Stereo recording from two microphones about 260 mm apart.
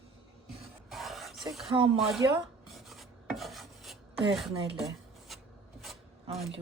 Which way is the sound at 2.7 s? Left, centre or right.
Centre.